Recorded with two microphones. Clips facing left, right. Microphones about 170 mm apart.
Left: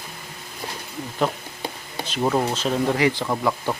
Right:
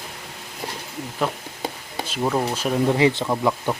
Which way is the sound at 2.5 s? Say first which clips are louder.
Even; 10° right (ahead or behind).